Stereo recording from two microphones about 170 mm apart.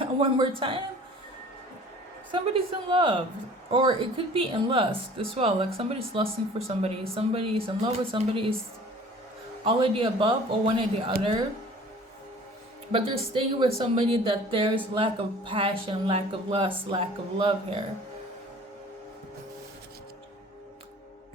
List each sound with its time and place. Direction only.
0.0 s a sound: 30° right (ahead or behind)
2.3 s speech: 30° right (ahead or behind)
9.6 s speech: 30° right (ahead or behind)
12.9 s speech: 30° right (ahead or behind)